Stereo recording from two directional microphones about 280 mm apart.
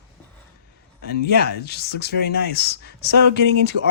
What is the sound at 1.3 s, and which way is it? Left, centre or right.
Speech, left.